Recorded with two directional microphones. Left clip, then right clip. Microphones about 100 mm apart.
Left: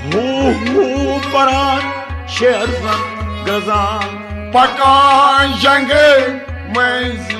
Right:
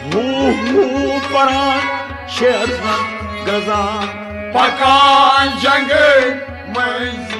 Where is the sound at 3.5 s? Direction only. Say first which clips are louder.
Left 2 dB; 40° left (ahead or behind).